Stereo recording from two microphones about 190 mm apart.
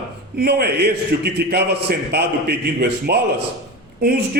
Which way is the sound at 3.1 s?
60° right (ahead or behind).